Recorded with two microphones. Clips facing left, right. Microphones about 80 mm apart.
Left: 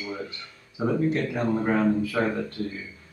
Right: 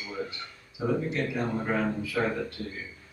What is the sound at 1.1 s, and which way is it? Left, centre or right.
Speech, left.